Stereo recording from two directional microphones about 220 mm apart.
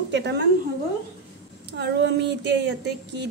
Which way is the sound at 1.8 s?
50° right (ahead or behind).